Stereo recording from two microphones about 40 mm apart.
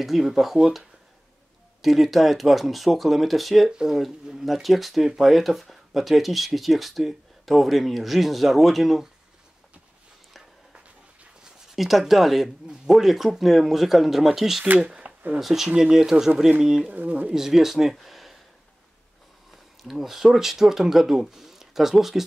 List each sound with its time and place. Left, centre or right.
0.0 s speech: centre
1.8 s speech: centre
11.7 s speech: centre
15.0 s a sound: right
15.4 s speech: centre
16.9 s speech: right
17.3 s speech: centre
17.9 s a sound: centre
19.5 s speech: centre